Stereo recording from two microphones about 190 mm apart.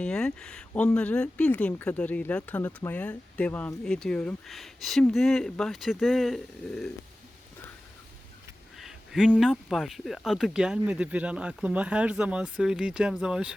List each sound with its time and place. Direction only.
0.0 s speech: 5° left (ahead or behind)
8.8 s speech: centre (ahead or behind)